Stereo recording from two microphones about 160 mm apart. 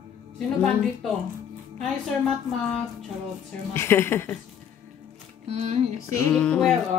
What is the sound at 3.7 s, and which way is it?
Speech, 15° left (ahead or behind).